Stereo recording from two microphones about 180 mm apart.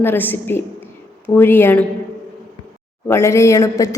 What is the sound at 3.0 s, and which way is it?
Speech, 15° left (ahead or behind).